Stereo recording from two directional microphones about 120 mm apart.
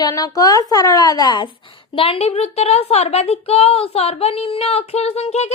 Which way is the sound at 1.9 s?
50° left (ahead or behind).